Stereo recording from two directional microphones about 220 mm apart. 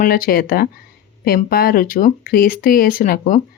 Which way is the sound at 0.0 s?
40° left (ahead or behind).